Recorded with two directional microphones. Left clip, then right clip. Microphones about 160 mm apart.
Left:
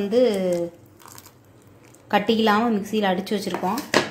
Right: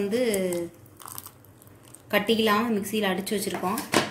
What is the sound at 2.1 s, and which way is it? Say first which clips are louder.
A woman's voice: left 3 dB; 40° left (ahead or behind).